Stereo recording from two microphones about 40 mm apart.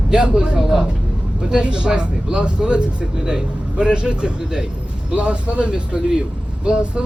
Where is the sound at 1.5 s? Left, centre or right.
Right.